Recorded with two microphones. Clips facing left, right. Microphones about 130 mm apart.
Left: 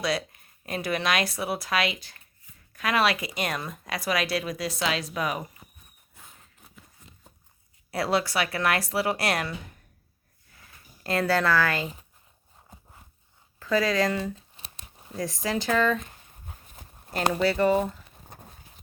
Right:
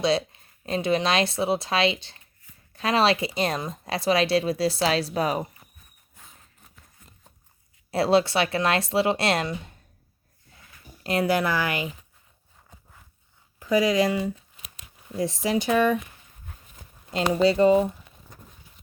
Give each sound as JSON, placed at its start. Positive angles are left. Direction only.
{"t": 0.0, "sound": "speech", "side_deg": -25}
{"t": 6.2, "sound": "a sound", "side_deg": 0}
{"t": 7.9, "sound": "speech", "side_deg": -25}
{"t": 11.0, "sound": "speech", "side_deg": -20}
{"t": 12.7, "sound": "a sound", "side_deg": 25}
{"t": 13.6, "sound": "speech", "side_deg": -15}
{"t": 14.5, "sound": "tearing", "side_deg": 30}
{"t": 15.1, "sound": "speech", "side_deg": -20}
{"t": 17.4, "sound": "speech", "side_deg": -20}
{"t": 18.3, "sound": "clip-clop", "side_deg": 60}